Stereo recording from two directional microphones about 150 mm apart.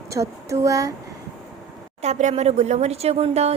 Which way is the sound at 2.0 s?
50° right (ahead or behind).